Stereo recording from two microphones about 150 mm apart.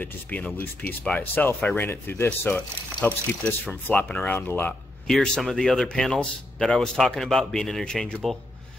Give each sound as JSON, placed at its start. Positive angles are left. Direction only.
{"t": 0.0, "sound": "speech", "side_deg": 10}